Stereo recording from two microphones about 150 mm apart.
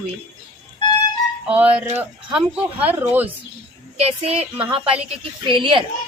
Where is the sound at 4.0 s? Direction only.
40° right (ahead or behind).